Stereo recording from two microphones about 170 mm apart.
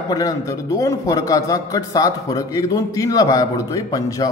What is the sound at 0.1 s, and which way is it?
A man's voice, 20° left (ahead or behind).